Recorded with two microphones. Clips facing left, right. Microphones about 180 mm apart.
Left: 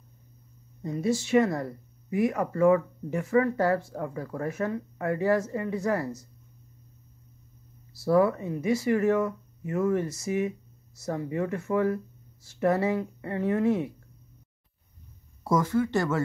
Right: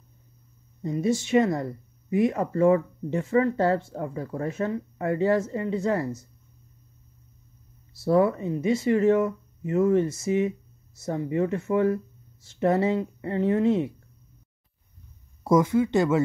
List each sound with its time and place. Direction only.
0.8 s speech: 20° right (ahead or behind)
7.9 s speech: 25° right (ahead or behind)
15.4 s speech: 20° right (ahead or behind)